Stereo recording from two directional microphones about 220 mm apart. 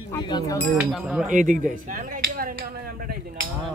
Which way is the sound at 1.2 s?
35° right (ahead or behind).